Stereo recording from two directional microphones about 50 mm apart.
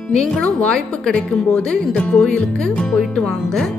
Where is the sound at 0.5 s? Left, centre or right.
Centre.